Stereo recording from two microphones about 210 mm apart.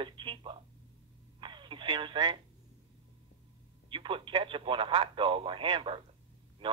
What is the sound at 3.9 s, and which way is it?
Speech, 25° right (ahead or behind).